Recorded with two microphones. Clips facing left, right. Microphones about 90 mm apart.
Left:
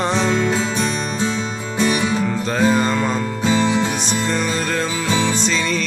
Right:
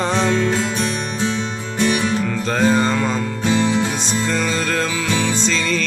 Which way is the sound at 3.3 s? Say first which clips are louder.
Left 1 dB; 10° left (ahead or behind).